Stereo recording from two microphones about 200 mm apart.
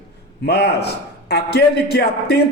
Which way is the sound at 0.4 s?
55° left (ahead or behind).